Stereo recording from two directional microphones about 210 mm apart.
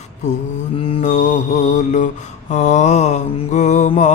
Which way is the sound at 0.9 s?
30° left (ahead or behind).